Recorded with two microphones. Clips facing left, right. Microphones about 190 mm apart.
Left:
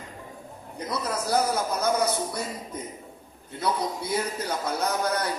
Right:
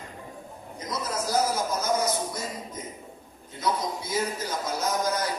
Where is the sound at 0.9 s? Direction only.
60° left (ahead or behind).